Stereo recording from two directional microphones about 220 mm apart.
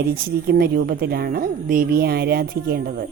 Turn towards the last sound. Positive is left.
turn(degrees=-45)  # may be behind; listen again after turning